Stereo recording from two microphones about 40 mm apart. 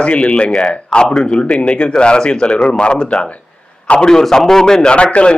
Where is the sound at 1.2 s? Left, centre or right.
Left.